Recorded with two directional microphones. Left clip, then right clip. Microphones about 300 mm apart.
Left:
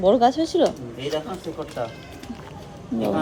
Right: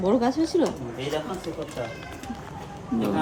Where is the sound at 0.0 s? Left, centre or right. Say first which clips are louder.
Left 6 dB; centre.